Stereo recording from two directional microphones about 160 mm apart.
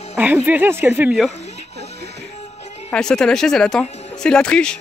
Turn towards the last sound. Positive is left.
turn(degrees=5)  # may be behind; listen again after turning